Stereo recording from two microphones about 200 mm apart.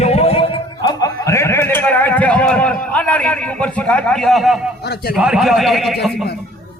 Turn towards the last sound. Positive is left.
turn(degrees=0)  # may be behind; listen again after turning